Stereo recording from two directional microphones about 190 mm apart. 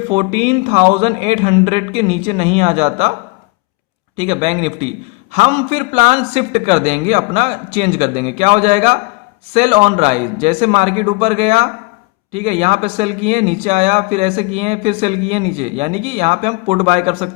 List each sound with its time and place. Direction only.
0.1 s a man's voice: 35° right (ahead or behind)
4.2 s a man's voice: 35° right (ahead or behind)